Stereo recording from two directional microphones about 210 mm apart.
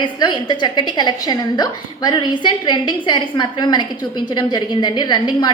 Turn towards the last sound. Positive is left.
turn(degrees=20)  # may be behind; listen again after turning